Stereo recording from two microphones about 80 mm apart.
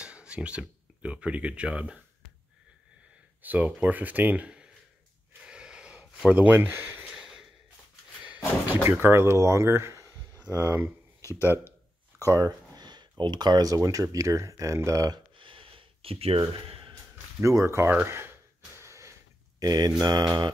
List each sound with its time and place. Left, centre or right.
0.0 s speech: centre
3.4 s speech: centre
5.4 s a sound: centre
6.3 s speech: right
7.2 s a sound: centre
8.8 s speech: right
12.3 s speech: right
13.2 s speech: right
15.3 s a sound: right
17.4 s speech: right
18.8 s a sound: right
19.6 s mantra: right